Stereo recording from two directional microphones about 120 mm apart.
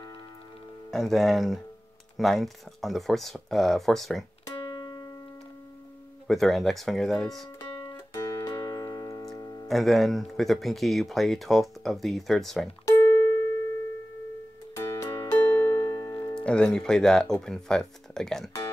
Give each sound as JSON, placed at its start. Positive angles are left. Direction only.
{"t": 0.9, "sound": "speech", "side_deg": 0}
{"t": 6.2, "sound": "speech", "side_deg": 0}
{"t": 8.1, "sound": "music", "side_deg": 25}
{"t": 9.7, "sound": "speech", "side_deg": 0}
{"t": 12.8, "sound": "music", "side_deg": 20}
{"t": 14.8, "sound": "music", "side_deg": 25}
{"t": 16.3, "sound": "speech", "side_deg": 10}